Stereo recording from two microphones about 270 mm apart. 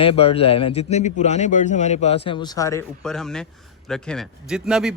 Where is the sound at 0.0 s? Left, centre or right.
Left.